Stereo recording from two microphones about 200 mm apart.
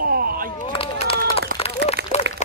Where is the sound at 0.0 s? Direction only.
45° right (ahead or behind).